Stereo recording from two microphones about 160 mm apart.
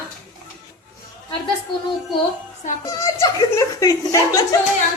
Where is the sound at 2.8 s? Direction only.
20° left (ahead or behind).